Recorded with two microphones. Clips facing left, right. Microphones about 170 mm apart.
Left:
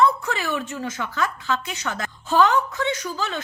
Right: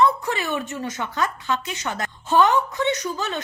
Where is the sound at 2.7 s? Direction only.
20° right (ahead or behind).